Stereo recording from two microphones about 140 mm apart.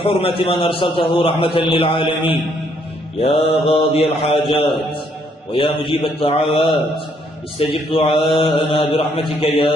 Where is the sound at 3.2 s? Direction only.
45° left (ahead or behind).